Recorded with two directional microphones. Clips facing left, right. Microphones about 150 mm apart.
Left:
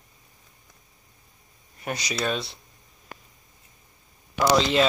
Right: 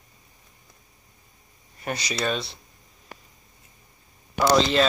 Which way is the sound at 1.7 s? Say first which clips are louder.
Right 1 dB; centre (ahead or behind).